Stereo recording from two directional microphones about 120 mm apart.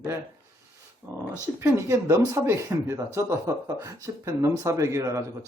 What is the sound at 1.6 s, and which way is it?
Speech, 20° right (ahead or behind).